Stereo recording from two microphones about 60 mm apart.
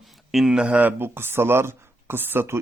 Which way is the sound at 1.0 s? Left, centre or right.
Right.